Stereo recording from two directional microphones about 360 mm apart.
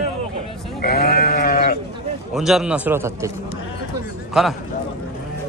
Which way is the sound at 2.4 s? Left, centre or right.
Centre.